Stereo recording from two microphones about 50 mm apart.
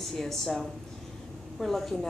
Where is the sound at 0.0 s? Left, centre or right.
Centre.